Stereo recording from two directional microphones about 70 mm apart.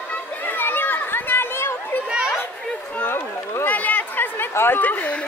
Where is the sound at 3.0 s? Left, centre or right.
Left.